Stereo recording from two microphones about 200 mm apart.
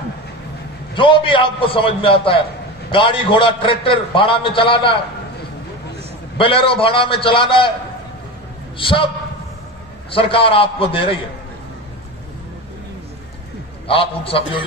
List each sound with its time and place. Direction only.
0.9 s a man's voice: 25° left (ahead or behind)
6.3 s a man's voice: 25° left (ahead or behind)
8.7 s a man's voice: 25° left (ahead or behind)
10.1 s a man's voice: 25° left (ahead or behind)
13.8 s a man's voice: 30° left (ahead or behind)